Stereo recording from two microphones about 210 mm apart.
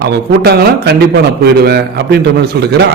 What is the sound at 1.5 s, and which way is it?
A man's voice, 50° right (ahead or behind).